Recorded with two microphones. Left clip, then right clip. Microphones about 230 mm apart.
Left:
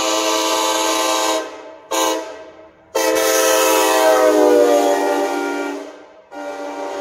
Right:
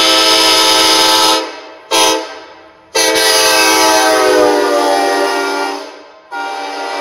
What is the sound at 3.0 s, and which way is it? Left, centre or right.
Train, right.